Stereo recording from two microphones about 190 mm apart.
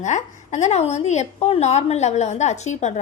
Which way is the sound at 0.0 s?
40° left (ahead or behind).